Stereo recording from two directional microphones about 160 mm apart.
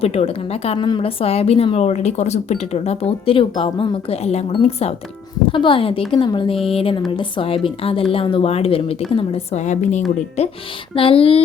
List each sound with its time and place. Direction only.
0.0 s a woman's voice: 40° left (ahead or behind)